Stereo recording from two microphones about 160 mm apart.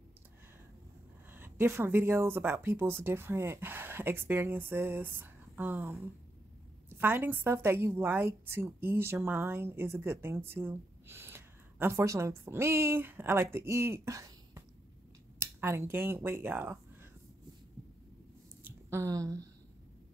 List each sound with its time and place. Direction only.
1.3 s a woman's voice: 15° right (ahead or behind)
7.0 s a woman's voice: 10° right (ahead or behind)
18.6 s a sound: 15° right (ahead or behind)